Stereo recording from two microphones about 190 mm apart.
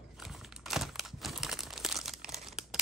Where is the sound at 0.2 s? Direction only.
Centre (ahead or behind).